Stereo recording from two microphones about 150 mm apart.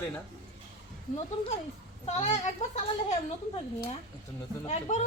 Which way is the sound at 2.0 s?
50° left (ahead or behind).